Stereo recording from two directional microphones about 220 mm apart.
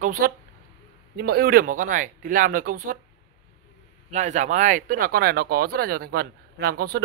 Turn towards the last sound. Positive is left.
turn(degrees=-45)  # may be behind; listen again after turning